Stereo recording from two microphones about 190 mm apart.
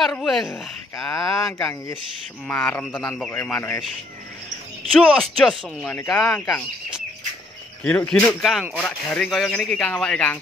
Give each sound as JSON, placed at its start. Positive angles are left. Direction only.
{"t": 0.0, "sound": "speech", "side_deg": 0}
{"t": 0.9, "sound": "speech", "side_deg": 15}
{"t": 4.9, "sound": "speech", "side_deg": 0}
{"t": 6.1, "sound": "speech", "side_deg": 15}
{"t": 7.8, "sound": "speech", "side_deg": 5}